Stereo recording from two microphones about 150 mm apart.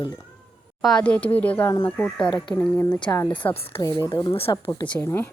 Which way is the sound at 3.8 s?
25° left (ahead or behind).